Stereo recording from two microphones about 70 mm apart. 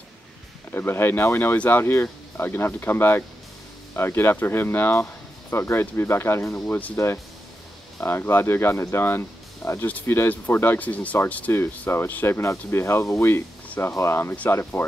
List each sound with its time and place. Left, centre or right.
0.7 s speech: left
8.0 s speech: left
11.9 s speech: left